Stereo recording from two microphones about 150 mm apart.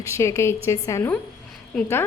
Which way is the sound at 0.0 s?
20° left (ahead or behind).